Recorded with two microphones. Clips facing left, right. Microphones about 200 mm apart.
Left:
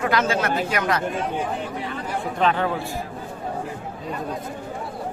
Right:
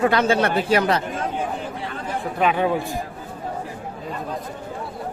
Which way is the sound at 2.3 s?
10° right (ahead or behind).